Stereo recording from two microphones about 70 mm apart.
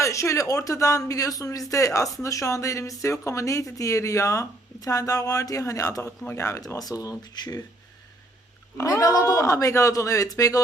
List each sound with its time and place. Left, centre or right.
0.0 s speech: left
6.7 s speech: left
8.8 s speech: left